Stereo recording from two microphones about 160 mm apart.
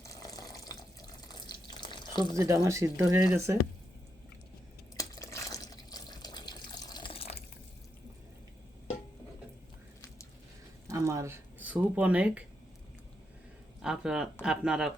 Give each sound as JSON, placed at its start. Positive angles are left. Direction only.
{"t": 0.0, "sound": "water", "side_deg": 20}
{"t": 2.6, "sound": "speech", "side_deg": -20}
{"t": 4.9, "sound": "water", "side_deg": 20}
{"t": 10.8, "sound": "a sound", "side_deg": -20}
{"t": 13.8, "sound": "speech", "side_deg": -5}